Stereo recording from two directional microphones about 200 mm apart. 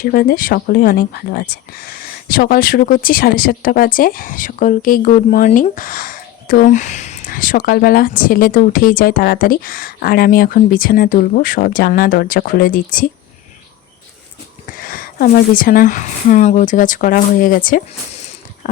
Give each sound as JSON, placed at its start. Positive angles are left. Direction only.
{"t": 0.0, "sound": "speech", "side_deg": 45}
{"t": 14.7, "sound": "speech", "side_deg": 45}